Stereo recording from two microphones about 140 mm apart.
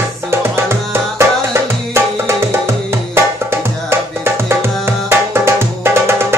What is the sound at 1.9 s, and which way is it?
Tabla, 20° right (ahead or behind).